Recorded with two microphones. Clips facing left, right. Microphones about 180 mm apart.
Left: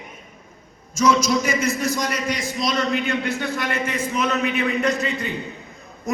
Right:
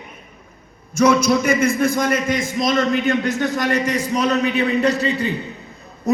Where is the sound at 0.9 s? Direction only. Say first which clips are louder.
Right 4 dB; 60° right (ahead or behind).